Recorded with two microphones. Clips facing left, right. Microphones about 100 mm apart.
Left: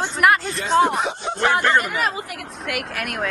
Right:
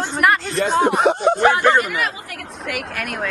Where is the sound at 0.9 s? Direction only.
55° right (ahead or behind).